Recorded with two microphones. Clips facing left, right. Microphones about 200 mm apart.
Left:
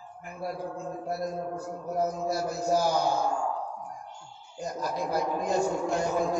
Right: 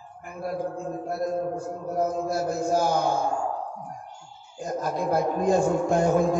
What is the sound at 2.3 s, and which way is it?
Speech, 50° right (ahead or behind).